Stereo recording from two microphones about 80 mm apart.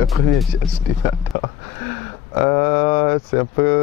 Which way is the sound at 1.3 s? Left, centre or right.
Left.